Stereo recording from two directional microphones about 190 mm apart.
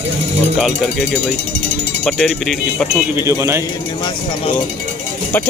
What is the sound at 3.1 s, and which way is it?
Speech, 15° right (ahead or behind).